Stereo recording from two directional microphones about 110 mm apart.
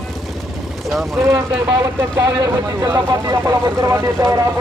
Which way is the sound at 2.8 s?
35° right (ahead or behind).